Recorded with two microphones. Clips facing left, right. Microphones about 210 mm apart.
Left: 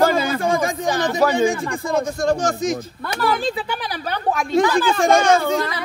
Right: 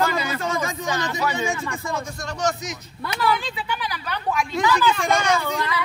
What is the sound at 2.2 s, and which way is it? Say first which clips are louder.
Speech: left 5 dB; 50° left (ahead or behind).